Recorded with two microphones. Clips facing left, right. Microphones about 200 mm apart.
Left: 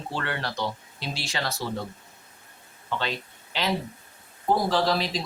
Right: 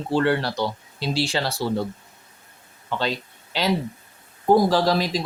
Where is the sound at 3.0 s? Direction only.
35° right (ahead or behind).